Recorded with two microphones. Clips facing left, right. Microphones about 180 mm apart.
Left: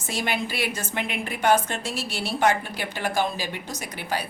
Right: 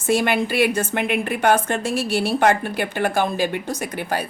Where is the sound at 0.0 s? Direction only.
55° right (ahead or behind).